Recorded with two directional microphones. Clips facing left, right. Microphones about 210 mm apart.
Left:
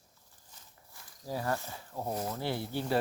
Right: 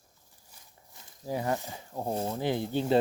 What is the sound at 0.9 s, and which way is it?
Speech, 20° right (ahead or behind).